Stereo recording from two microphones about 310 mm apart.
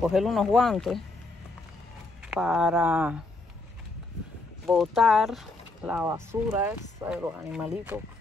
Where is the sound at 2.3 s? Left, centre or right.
Centre.